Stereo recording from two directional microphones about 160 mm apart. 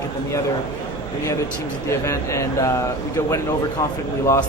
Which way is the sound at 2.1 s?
20° left (ahead or behind).